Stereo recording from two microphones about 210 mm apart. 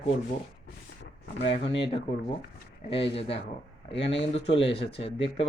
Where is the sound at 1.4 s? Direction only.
25° left (ahead or behind).